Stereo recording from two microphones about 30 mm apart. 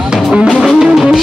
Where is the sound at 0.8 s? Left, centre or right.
Centre.